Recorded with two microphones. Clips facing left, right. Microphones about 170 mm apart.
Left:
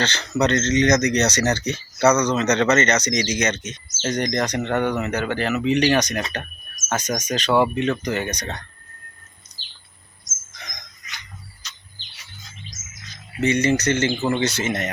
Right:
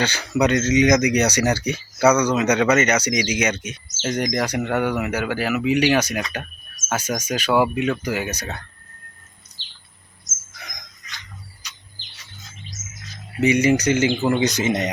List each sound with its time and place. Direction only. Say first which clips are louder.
0.0 s speech: right 1 dB; 10° right (ahead or behind)
10.5 s a sound: even; 10° right (ahead or behind)
11.6 s bird: even; 10° right (ahead or behind)
13.4 s speech: right 2 dB; 15° right (ahead or behind)